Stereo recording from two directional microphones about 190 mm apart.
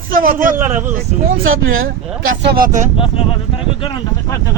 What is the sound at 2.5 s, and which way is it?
Speech, 45° right (ahead or behind).